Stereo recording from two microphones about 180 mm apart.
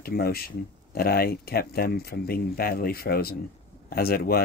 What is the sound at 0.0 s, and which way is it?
Speech, 60° left (ahead or behind).